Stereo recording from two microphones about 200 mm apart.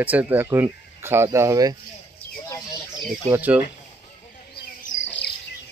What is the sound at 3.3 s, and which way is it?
Speech, 10° right (ahead or behind).